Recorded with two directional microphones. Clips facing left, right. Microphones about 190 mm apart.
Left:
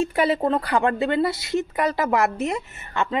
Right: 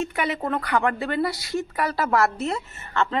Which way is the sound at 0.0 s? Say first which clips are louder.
Left 5 dB; 30° left (ahead or behind).